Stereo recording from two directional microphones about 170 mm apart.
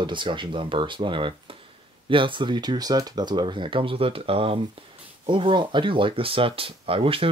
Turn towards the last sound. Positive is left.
turn(degrees=-35)  # may be behind; listen again after turning